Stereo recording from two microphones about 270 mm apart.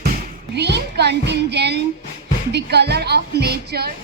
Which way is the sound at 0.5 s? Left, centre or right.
Right.